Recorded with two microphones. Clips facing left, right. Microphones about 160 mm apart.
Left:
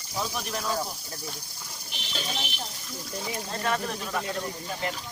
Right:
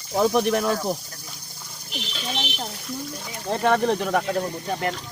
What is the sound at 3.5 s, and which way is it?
Speech, 70° right (ahead or behind).